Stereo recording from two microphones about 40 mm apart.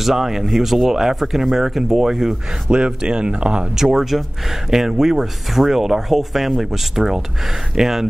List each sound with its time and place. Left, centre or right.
0.0 s speech: centre
2.7 s speech: right
3.7 s speech: centre